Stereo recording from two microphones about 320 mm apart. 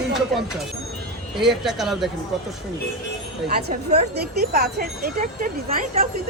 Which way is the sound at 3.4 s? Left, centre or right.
Right.